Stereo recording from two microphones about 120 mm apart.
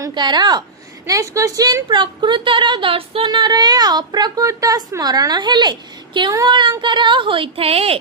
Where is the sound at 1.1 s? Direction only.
25° right (ahead or behind); by 8.0 s 55° right (ahead or behind).